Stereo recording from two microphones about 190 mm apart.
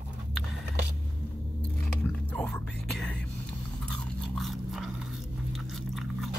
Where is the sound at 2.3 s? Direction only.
5° left (ahead or behind).